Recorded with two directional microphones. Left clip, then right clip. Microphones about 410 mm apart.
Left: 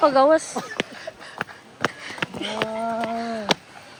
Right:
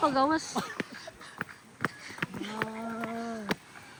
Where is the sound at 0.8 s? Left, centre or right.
Centre.